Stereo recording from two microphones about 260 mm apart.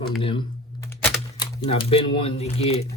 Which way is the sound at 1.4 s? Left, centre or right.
Centre.